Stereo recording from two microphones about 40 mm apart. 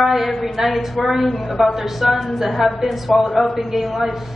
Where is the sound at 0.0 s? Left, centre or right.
Centre.